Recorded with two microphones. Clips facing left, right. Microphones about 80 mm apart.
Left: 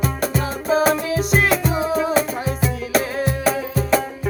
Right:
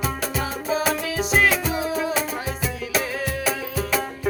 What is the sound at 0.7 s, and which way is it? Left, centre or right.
Music, left.